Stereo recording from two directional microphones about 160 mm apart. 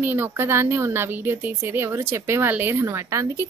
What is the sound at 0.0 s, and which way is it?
Speech, 15° right (ahead or behind).